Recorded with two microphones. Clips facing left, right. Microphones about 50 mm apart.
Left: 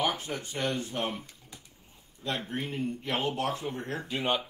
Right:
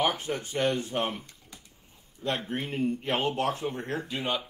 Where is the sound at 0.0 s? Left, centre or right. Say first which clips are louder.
Right 3 dB; right.